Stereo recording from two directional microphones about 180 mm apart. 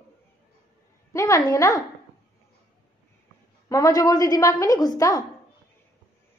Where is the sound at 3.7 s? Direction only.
20° left (ahead or behind).